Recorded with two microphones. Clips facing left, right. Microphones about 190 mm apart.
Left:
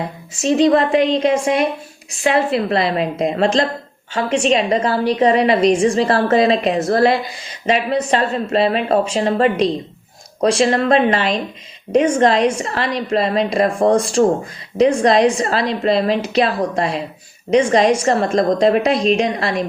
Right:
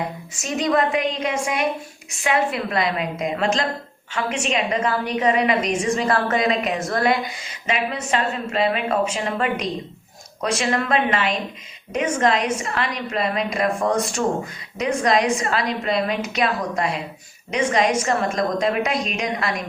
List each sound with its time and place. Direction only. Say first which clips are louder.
0.3 s a woman's voice: left 8 dB; 30° left (ahead or behind)